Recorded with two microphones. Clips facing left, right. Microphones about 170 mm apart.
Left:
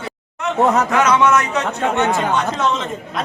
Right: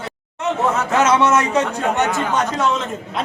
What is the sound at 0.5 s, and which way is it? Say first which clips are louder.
Speech: left 6 dB; 35° left (ahead or behind).